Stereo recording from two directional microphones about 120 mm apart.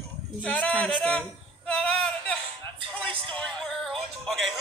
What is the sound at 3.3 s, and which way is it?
Music, 5° left (ahead or behind).